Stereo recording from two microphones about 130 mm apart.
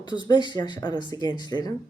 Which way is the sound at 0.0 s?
35° left (ahead or behind).